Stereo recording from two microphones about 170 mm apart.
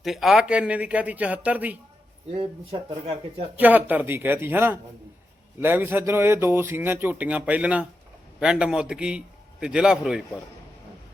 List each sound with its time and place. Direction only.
0.0 s speech: centre (ahead or behind)
2.3 s speech: 35° right (ahead or behind)
3.6 s a man's voice: 10° right (ahead or behind)